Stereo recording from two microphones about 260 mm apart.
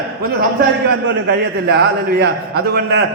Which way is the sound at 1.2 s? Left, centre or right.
Right.